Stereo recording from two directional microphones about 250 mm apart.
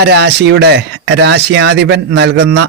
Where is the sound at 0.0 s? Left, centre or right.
Right.